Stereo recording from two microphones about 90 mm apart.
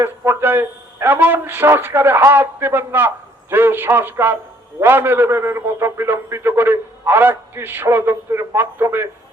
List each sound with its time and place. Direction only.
0.0 s a man's voice: 25° right (ahead or behind)